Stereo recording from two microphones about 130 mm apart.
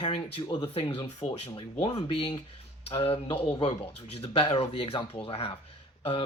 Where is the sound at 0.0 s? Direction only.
40° left (ahead or behind).